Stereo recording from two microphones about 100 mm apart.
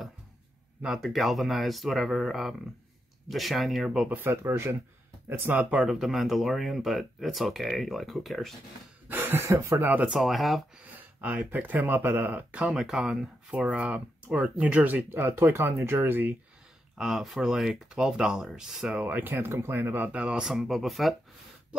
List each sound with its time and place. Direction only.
0.8 s speech: centre (ahead or behind)
4.1 s speech: 25° right (ahead or behind)
5.8 s speech: 5° right (ahead or behind)
9.1 s speech: 20° right (ahead or behind)
10.1 s speech: centre (ahead or behind)
11.0 s speech: 15° right (ahead or behind)
16.9 s speech: 5° right (ahead or behind)